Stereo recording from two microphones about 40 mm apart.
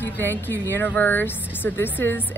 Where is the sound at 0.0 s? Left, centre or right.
Left.